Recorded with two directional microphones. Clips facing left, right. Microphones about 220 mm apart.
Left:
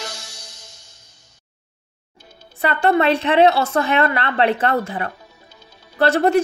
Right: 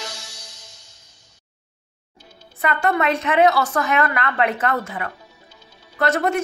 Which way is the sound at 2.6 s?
30° left (ahead or behind).